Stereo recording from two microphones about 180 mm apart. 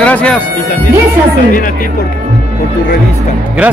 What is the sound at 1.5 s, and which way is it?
Speech, 50° left (ahead or behind).